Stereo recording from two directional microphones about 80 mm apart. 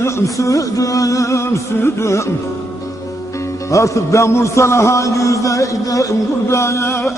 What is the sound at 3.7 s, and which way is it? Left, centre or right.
A man's voice, left.